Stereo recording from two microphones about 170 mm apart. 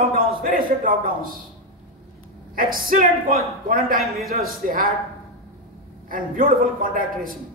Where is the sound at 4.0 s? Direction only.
Centre (ahead or behind).